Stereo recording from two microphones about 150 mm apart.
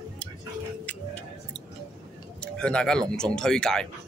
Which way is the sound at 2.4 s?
5° left (ahead or behind).